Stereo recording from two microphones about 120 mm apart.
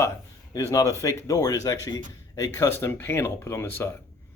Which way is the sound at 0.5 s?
30° left (ahead or behind).